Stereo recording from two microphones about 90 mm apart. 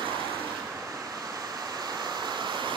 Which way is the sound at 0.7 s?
40° right (ahead or behind).